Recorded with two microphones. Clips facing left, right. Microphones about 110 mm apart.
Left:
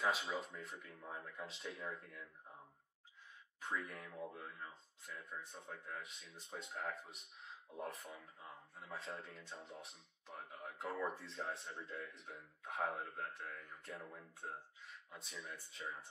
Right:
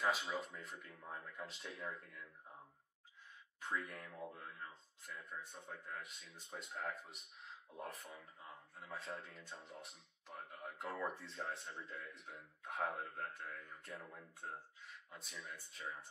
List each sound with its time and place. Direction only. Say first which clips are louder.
0.0 s speech: even; centre (ahead or behind)
3.6 s speech: even; centre (ahead or behind)